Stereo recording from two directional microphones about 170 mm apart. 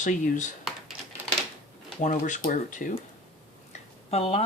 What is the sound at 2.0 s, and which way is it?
Speech, 45° left (ahead or behind).